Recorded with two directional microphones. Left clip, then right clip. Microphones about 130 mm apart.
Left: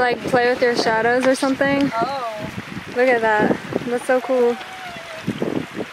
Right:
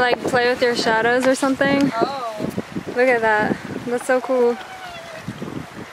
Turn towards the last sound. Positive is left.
turn(degrees=-10)  # may be behind; listen again after turning